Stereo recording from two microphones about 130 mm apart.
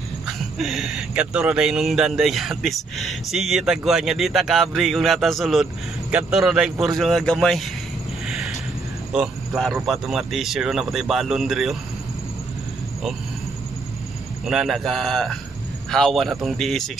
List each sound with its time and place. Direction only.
0.6 s speech: centre (ahead or behind)
8.3 s a sound: 5° right (ahead or behind)
9.1 s a man's voice: 5° right (ahead or behind)
14.4 s speech: 5° right (ahead or behind)